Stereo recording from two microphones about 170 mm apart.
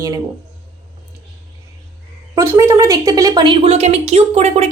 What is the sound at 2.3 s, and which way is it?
A woman's voice, 15° right (ahead or behind).